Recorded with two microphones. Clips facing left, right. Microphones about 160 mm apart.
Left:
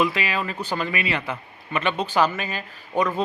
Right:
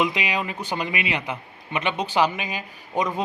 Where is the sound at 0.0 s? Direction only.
15° right (ahead or behind).